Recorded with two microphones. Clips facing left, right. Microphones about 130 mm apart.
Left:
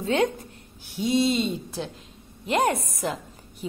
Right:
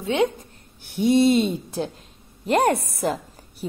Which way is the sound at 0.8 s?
60° right (ahead or behind).